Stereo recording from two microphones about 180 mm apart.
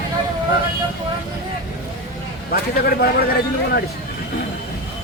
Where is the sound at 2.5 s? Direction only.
55° left (ahead or behind).